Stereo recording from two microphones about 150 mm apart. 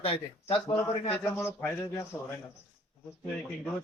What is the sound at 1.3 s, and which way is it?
Speech, 15° left (ahead or behind).